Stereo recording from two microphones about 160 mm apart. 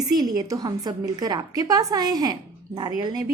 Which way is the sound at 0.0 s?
25° right (ahead or behind).